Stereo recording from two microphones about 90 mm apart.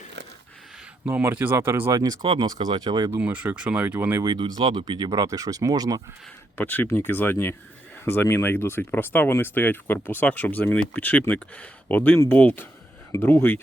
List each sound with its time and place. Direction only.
1.0 s speech: 20° right (ahead or behind)
1.9 s speech: 45° right (ahead or behind)
2.2 s speech: 55° right (ahead or behind)
3.2 s speech: 15° right (ahead or behind)
4.4 s speech: 55° right (ahead or behind)
6.6 s speech: 20° left (ahead or behind)